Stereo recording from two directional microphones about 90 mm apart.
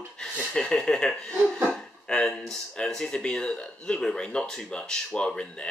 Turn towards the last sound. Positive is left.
turn(degrees=10)  # may be behind; listen again after turning